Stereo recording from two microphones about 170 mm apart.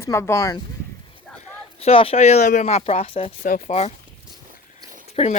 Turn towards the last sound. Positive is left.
turn(degrees=35)  # may be behind; listen again after turning